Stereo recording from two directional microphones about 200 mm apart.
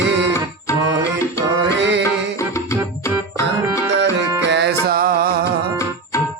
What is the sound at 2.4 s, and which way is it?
Music, 15° left (ahead or behind).